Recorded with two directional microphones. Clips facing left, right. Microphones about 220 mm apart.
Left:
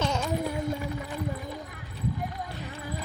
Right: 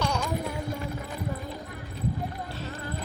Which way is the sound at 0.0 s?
20° left (ahead or behind).